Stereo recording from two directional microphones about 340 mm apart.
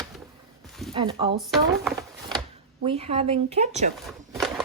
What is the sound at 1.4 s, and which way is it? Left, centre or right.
Speech, centre.